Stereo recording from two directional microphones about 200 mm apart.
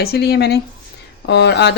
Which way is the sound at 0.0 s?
50° left (ahead or behind).